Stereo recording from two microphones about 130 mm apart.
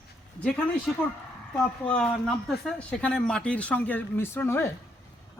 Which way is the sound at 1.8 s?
10° left (ahead or behind).